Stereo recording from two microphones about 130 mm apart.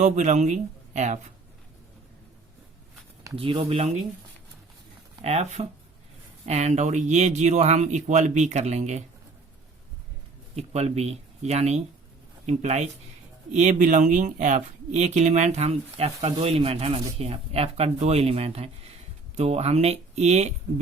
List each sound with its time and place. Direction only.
0.0 s speech: 65° right (ahead or behind)
3.3 s speech: 45° right (ahead or behind)
5.2 s speech: 60° right (ahead or behind)
10.5 s speech: 55° right (ahead or behind)